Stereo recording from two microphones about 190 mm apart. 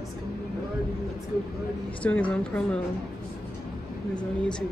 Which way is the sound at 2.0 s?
5° left (ahead or behind).